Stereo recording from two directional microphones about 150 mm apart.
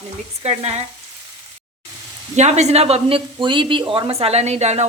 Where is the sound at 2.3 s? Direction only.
50° right (ahead or behind).